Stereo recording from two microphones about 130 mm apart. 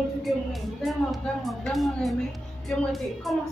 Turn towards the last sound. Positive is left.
turn(degrees=0)  # may be behind; listen again after turning